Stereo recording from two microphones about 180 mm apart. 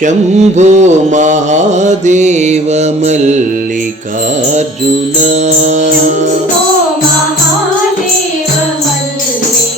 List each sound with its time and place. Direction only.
0.0 s mantra: 40° right (ahead or behind)
5.2 s mantra: 40° right (ahead or behind)